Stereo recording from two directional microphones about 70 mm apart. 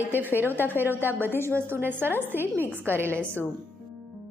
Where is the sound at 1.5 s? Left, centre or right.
Right.